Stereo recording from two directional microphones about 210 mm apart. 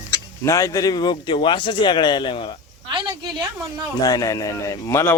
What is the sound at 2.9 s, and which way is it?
Speech, 20° right (ahead or behind).